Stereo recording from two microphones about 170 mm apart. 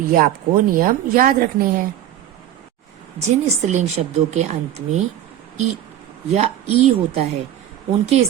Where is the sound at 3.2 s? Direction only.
40° right (ahead or behind).